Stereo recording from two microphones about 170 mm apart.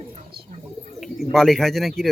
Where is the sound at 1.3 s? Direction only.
Centre (ahead or behind).